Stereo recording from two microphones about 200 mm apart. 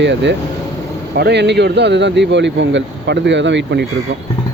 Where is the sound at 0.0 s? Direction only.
60° right (ahead or behind).